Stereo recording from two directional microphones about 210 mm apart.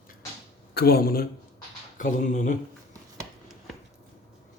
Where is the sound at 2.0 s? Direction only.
35° left (ahead or behind).